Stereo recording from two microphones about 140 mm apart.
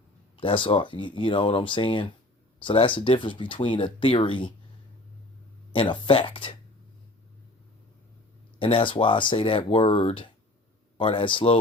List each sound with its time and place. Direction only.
0.3 s speech: 35° left (ahead or behind)
5.7 s speech: 40° left (ahead or behind)
8.5 s speech: 35° left (ahead or behind)